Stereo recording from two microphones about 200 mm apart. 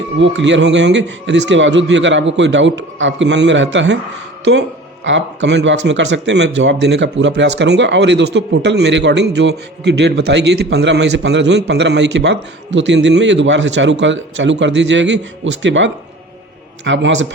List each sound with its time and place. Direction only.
0.2 s speech: 65° right (ahead or behind)
5.0 s a man's voice: 65° right (ahead or behind)